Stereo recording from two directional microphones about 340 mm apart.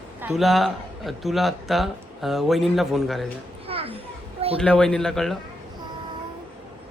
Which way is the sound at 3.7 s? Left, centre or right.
Centre.